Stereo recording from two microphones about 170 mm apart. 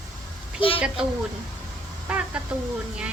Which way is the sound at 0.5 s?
30° left (ahead or behind).